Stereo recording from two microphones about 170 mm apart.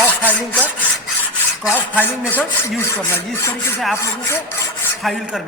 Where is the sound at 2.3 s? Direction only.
10° left (ahead or behind).